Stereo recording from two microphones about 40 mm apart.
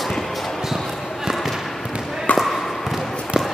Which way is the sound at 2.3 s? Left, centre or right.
Left.